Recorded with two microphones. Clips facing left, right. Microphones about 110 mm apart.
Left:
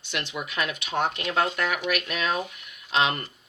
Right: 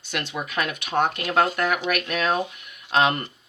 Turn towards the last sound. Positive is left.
turn(degrees=-50)  # may be behind; listen again after turning